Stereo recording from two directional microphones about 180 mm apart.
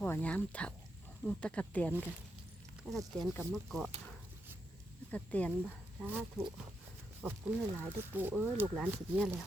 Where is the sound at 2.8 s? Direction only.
5° right (ahead or behind).